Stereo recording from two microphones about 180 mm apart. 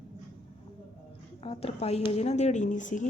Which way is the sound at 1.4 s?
30° left (ahead or behind).